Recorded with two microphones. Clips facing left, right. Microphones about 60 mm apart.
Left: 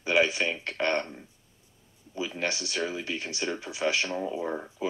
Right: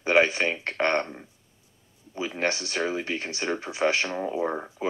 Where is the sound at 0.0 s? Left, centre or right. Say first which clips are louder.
Right 3 dB; right.